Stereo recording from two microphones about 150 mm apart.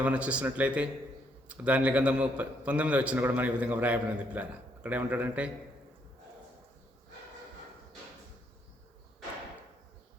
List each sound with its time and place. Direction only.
0.0 s a man's voice: 10° right (ahead or behind)